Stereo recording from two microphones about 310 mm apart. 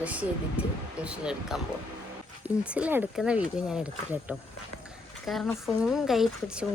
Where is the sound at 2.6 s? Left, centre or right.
Centre.